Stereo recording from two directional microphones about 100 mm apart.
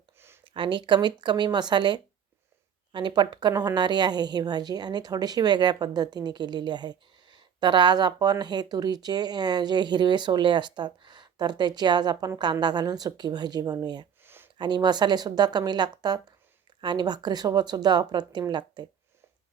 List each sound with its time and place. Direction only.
0.4 s a woman's voice: 55° right (ahead or behind)
14.3 s a sound: 20° right (ahead or behind)
14.6 s a woman's voice: 45° right (ahead or behind)